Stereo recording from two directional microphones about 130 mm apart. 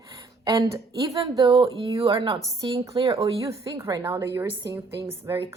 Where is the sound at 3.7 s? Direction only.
25° right (ahead or behind).